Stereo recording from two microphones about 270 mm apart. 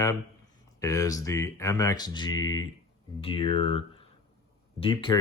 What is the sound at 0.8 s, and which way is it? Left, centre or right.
Speech, centre.